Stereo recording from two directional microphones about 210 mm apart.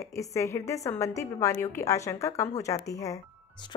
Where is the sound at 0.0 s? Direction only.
15° left (ahead or behind).